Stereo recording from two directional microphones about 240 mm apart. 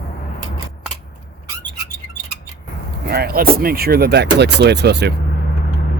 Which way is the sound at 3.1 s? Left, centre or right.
Right.